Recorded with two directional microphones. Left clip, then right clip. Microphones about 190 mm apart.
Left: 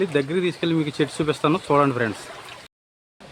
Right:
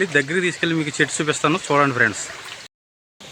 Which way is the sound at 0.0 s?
5° left (ahead or behind).